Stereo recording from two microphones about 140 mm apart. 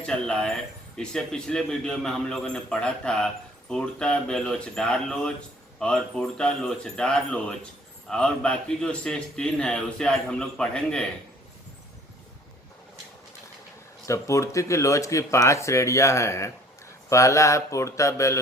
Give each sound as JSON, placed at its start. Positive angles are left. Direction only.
{"t": 0.0, "sound": "a man's voice", "side_deg": 5}
{"t": 14.1, "sound": "speech", "side_deg": 20}